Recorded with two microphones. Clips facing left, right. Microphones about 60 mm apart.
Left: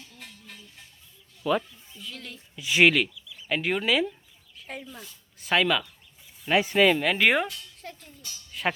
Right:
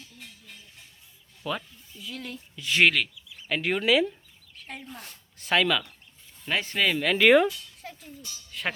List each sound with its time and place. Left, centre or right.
1.5 s a child's voice: centre
3.2 s a sound: right
3.5 s a child's voice: centre
4.9 s speech: right
5.4 s a child's voice: centre